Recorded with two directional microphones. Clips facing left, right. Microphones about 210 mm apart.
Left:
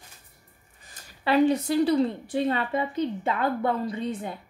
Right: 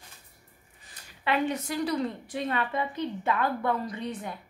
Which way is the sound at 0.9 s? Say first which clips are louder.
Left 5 dB; 35° left (ahead or behind).